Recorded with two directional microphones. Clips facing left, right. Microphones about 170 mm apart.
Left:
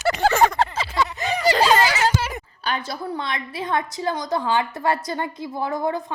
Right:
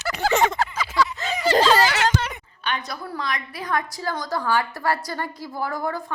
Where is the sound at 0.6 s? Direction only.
30° left (ahead or behind).